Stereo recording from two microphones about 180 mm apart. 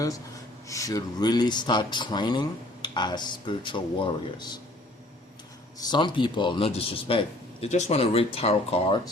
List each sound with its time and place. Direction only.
0.7 s speech: 20° left (ahead or behind)
5.8 s a man's voice: 25° left (ahead or behind)